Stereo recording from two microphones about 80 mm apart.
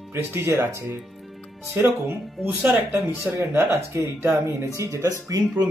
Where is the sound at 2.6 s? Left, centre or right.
Centre.